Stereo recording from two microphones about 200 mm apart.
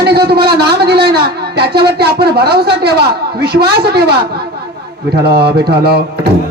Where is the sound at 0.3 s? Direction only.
55° right (ahead or behind).